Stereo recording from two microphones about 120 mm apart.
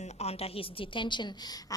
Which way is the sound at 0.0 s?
65° left (ahead or behind).